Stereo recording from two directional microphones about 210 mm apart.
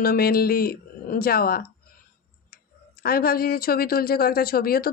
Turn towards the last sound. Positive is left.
turn(degrees=45)  # may be behind; listen again after turning